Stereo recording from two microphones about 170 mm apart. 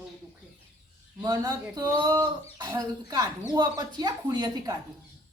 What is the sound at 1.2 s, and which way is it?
Speech, 20° right (ahead or behind).